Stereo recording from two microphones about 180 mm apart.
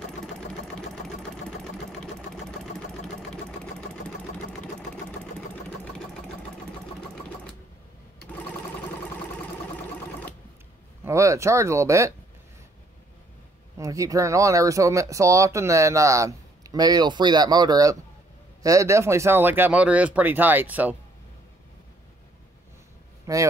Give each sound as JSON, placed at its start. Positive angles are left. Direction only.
{"t": 0.7, "sound": "sewing machine", "side_deg": 5}
{"t": 11.1, "sound": "speech", "side_deg": -15}
{"t": 13.7, "sound": "speech", "side_deg": -20}
{"t": 23.3, "sound": "speech", "side_deg": -15}